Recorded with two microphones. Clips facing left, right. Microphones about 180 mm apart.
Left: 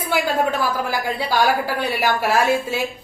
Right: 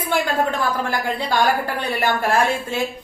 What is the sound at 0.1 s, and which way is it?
A woman's voice, 5° left (ahead or behind).